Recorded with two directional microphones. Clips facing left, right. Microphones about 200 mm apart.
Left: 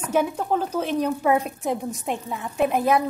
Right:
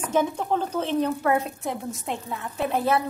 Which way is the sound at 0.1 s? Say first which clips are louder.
Left 2 dB; 10° left (ahead or behind).